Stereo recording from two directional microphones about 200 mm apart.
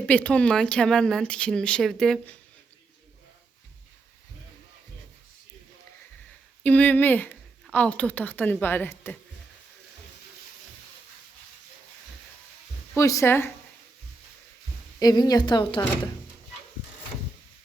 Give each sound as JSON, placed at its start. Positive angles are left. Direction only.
{"t": 0.0, "sound": "speech", "side_deg": 5}
{"t": 6.6, "sound": "speech", "side_deg": 5}
{"t": 13.0, "sound": "speech", "side_deg": 15}
{"t": 14.9, "sound": "a woman's voice", "side_deg": 20}